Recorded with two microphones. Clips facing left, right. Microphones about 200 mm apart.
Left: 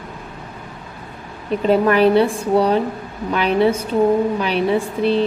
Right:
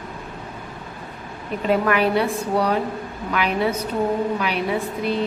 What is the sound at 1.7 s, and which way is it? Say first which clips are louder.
A woman's voice: left 5 dB; 30° left (ahead or behind).